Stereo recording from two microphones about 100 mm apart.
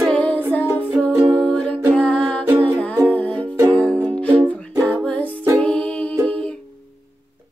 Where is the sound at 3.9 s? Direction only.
20° right (ahead or behind).